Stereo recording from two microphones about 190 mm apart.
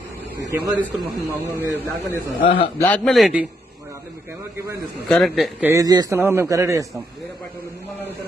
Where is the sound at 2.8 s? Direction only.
5° left (ahead or behind).